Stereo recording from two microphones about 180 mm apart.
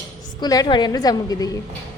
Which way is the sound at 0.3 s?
20° left (ahead or behind).